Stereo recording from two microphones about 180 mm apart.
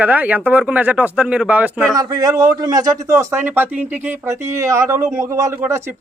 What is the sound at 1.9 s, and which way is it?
A man's voice, 20° right (ahead or behind).